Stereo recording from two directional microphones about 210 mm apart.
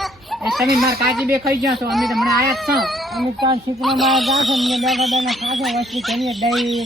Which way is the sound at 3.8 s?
Centre (ahead or behind).